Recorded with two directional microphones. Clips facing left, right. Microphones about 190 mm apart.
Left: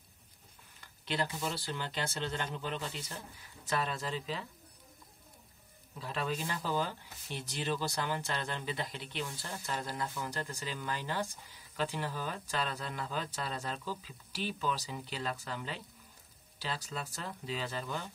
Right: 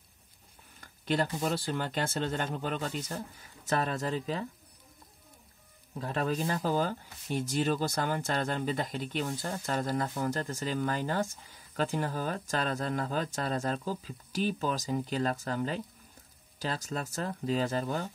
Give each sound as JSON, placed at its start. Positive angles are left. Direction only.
{"t": 0.7, "sound": "speech", "side_deg": -45}
{"t": 5.9, "sound": "speech", "side_deg": -45}